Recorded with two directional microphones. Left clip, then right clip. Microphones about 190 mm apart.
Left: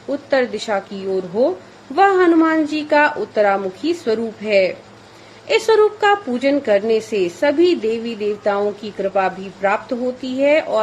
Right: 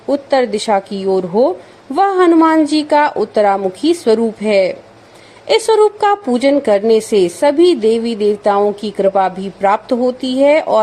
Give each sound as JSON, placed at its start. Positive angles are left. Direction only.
{"t": 0.1, "sound": "a woman's voice", "side_deg": -40}